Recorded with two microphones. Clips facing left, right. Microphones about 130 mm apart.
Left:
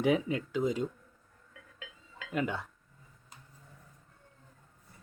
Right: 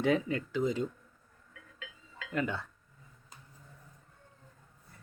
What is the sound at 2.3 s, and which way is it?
Speech, 15° left (ahead or behind).